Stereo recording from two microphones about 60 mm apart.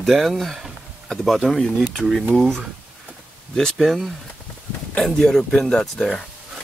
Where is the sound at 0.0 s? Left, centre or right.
Centre.